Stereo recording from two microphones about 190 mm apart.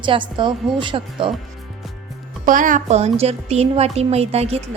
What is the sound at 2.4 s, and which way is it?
A woman's voice, 45° right (ahead or behind).